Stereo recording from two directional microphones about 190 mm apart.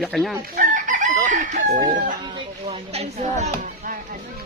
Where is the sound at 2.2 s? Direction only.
30° right (ahead or behind).